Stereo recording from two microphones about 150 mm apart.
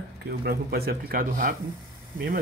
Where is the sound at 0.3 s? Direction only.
90° right; by 1.5 s 75° right (ahead or behind).